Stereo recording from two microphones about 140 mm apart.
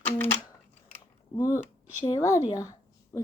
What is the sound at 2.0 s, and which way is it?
Speech, 30° left (ahead or behind).